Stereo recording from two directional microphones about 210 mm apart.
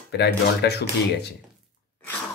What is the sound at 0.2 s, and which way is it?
Speech, 50° left (ahead or behind).